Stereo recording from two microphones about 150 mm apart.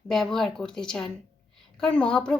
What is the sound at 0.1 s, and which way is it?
A woman's voice, centre (ahead or behind).